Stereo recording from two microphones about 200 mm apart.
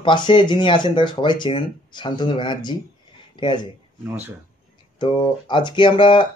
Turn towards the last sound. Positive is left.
turn(degrees=25)  # may be behind; listen again after turning